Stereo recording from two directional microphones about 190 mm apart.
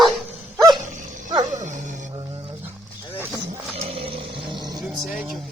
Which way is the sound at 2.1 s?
25° right (ahead or behind).